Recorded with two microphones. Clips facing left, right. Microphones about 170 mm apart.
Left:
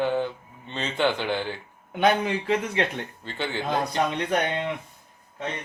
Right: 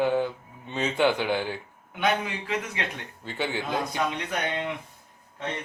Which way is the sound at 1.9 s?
35° left (ahead or behind).